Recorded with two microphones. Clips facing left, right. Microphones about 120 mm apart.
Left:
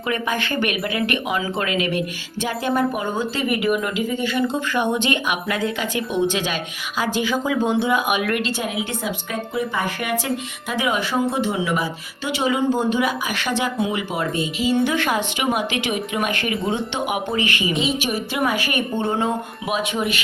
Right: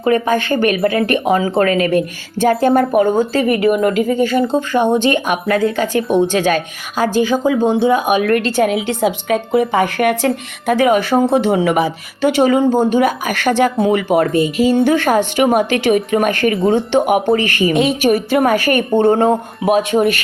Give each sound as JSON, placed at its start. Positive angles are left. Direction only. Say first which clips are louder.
{"t": 0.0, "sound": "a woman's voice", "louder": "right 9 dB", "side_deg": -40}
{"t": 8.6, "sound": "a woman's voice", "louder": "right 10 dB", "side_deg": -80}